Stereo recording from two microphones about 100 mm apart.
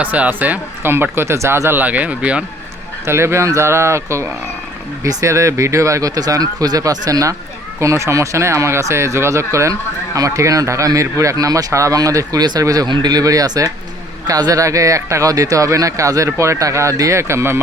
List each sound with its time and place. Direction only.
0.0 s speech: 15° right (ahead or behind)
1.8 s speech: 15° right (ahead or behind)
3.1 s speech: 25° right (ahead or behind)